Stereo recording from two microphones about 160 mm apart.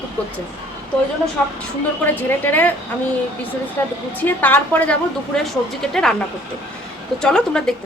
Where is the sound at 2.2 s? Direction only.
10° left (ahead or behind).